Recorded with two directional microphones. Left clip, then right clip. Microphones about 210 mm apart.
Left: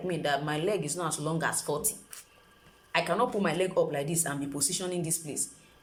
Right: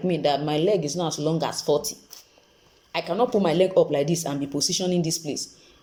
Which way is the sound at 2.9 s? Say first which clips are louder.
Right 4 dB; 15° right (ahead or behind).